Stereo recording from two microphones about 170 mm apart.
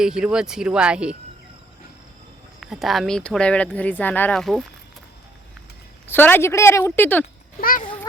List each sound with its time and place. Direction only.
0.0 s speech: 5° right (ahead or behind)
2.6 s speech: centre (ahead or behind)
6.1 s a woman's voice: 10° left (ahead or behind)
7.6 s speech: 55° left (ahead or behind)